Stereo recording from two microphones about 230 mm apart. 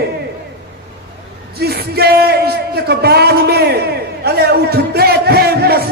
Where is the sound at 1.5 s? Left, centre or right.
Right.